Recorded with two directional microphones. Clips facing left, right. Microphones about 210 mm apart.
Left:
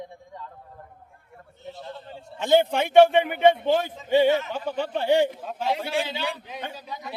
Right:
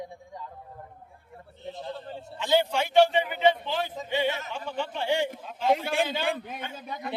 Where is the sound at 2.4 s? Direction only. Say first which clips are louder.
Left 5 dB; 50° left (ahead or behind).